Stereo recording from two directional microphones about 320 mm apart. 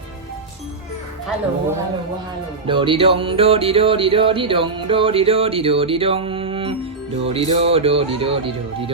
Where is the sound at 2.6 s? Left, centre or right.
Centre.